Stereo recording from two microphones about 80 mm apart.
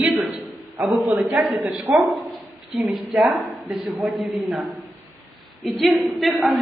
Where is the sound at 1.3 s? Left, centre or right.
Centre.